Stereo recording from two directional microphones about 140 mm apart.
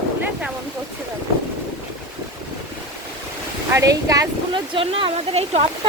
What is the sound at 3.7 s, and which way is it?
Speech, 25° right (ahead or behind).